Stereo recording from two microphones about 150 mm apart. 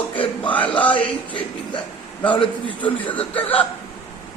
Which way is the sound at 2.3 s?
35° left (ahead or behind).